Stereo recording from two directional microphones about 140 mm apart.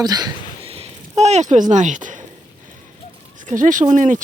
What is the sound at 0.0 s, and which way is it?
Speech, 30° right (ahead or behind).